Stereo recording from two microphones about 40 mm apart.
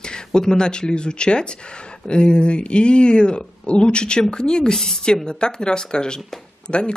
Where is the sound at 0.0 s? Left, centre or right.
Centre.